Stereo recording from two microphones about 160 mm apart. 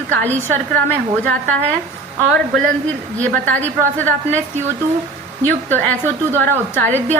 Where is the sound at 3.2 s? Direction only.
10° left (ahead or behind).